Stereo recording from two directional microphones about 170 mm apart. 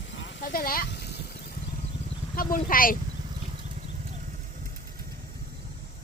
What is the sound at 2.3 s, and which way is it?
Speech, 55° left (ahead or behind).